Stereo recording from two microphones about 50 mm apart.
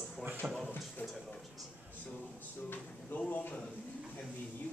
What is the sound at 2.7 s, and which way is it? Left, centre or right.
Speech, left.